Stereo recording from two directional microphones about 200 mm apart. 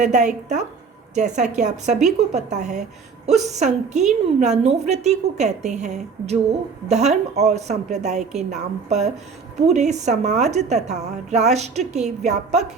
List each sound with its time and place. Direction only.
0.0 s a woman's voice: 35° right (ahead or behind)